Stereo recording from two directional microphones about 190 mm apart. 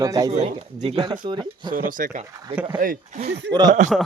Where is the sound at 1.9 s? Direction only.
45° right (ahead or behind).